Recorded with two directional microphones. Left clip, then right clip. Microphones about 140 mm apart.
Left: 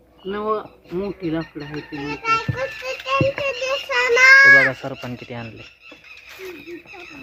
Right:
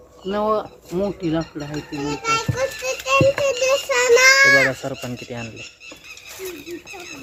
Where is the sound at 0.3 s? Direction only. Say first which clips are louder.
Right 3 dB; 55° right (ahead or behind).